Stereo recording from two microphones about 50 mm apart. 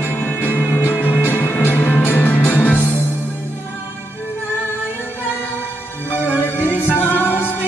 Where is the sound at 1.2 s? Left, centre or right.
Left.